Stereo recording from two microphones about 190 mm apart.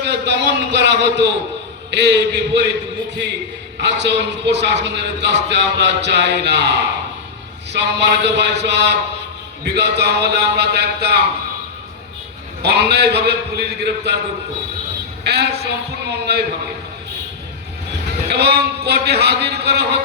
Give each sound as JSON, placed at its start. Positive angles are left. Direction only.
{"t": 0.0, "sound": "a sound", "side_deg": -65}
{"t": 1.9, "sound": "a man's voice", "side_deg": -65}
{"t": 3.8, "sound": "a man's voice", "side_deg": -65}
{"t": 7.7, "sound": "a man's voice", "side_deg": -65}
{"t": 12.6, "sound": "a man's voice", "side_deg": -60}
{"t": 15.2, "sound": "a man's voice", "side_deg": -60}
{"t": 18.3, "sound": "a man's voice", "side_deg": -60}